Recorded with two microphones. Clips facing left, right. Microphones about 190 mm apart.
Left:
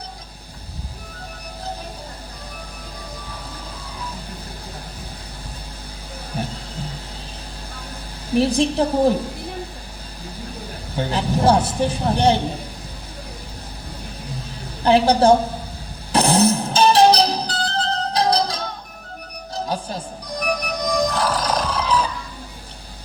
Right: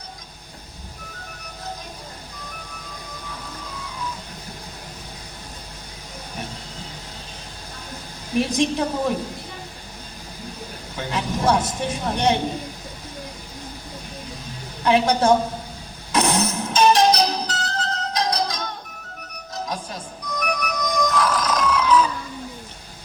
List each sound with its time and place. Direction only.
8.4 s speech: 30° left (ahead or behind)
10.9 s speech: 30° left (ahead or behind)
14.8 s speech: 30° left (ahead or behind)
16.1 s music: 30° left (ahead or behind)
19.6 s music: 30° left (ahead or behind)